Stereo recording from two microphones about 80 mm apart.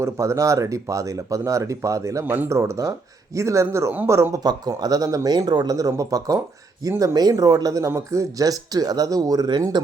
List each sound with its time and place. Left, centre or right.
0.0 s speech: right
2.2 s speech: right
2.5 s speech: right
4.4 s speech: right